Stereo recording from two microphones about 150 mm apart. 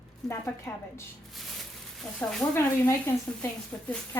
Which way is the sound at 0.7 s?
20° left (ahead or behind).